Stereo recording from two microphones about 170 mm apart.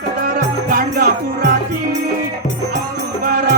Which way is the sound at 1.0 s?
60° right (ahead or behind).